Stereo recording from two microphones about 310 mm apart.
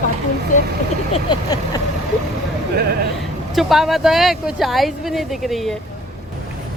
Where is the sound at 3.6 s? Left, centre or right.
Centre.